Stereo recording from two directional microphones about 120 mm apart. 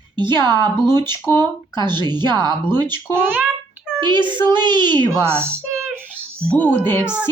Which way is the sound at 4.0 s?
40° right (ahead or behind).